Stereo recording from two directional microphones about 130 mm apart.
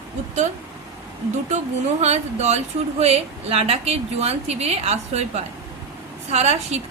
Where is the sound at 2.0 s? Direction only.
60° right (ahead or behind).